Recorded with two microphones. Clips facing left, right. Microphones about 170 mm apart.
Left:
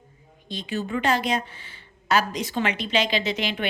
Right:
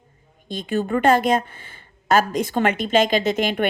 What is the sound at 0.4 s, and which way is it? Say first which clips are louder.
A woman's voice: right 6 dB; 50° right (ahead or behind).